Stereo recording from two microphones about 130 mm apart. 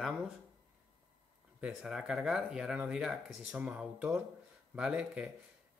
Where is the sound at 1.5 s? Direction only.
10° right (ahead or behind).